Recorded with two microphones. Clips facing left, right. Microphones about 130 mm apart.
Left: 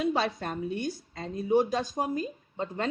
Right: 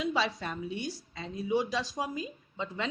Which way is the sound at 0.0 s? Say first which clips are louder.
Left 3 dB; 50° left (ahead or behind).